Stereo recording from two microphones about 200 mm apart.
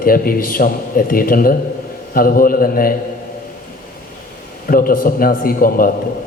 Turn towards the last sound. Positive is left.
turn(degrees=45)  # may be behind; listen again after turning